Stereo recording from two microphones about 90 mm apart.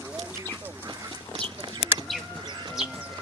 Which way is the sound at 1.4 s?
60° right (ahead or behind).